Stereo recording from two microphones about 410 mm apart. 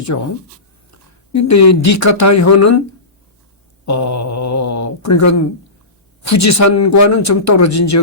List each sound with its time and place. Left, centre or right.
0.1 s speech: left
1.3 s speech: left
3.8 s speech: left